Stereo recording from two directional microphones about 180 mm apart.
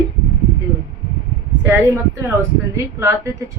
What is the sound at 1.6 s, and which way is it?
Speech, 10° right (ahead or behind).